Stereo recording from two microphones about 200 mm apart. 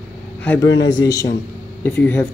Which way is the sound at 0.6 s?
65° left (ahead or behind).